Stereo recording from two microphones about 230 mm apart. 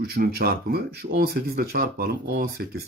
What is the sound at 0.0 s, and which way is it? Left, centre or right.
Speech, right.